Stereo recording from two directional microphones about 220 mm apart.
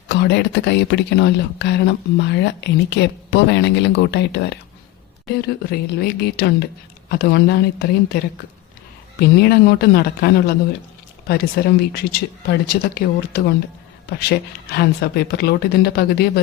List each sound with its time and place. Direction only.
0.1 s speech: 50° left (ahead or behind)
9.4 s speech: 45° left (ahead or behind)